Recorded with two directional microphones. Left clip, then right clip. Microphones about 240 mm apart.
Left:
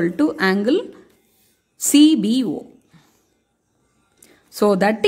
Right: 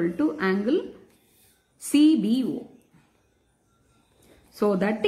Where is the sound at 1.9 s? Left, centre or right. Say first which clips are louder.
Left 6 dB; left.